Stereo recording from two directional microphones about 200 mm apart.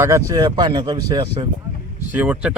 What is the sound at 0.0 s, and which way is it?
Speech, 15° right (ahead or behind).